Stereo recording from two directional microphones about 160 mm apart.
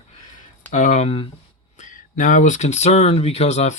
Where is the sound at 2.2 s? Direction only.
50° left (ahead or behind).